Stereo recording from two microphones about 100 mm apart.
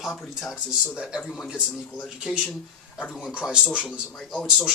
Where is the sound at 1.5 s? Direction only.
5° right (ahead or behind).